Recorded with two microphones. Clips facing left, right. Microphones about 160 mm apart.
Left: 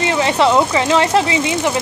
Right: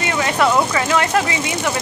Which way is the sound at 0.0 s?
25° left (ahead or behind).